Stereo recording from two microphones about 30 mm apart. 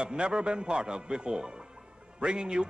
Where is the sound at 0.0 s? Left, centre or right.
Right.